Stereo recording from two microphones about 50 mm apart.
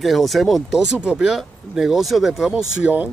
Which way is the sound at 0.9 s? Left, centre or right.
Right.